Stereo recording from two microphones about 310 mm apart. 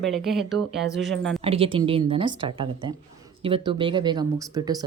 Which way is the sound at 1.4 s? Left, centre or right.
Centre.